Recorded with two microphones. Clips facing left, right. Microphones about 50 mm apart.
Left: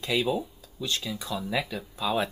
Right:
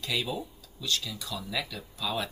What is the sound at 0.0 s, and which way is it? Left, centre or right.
Speech, left.